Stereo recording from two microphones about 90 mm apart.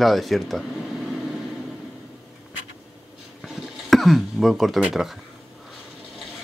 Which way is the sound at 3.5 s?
Centre (ahead or behind).